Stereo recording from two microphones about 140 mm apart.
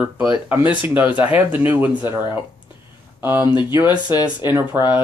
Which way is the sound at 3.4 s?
35° left (ahead or behind).